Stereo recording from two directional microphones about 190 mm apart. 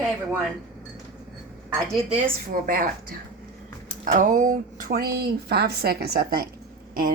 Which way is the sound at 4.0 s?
40° right (ahead or behind).